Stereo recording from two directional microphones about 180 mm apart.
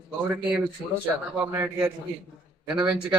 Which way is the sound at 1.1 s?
15° right (ahead or behind).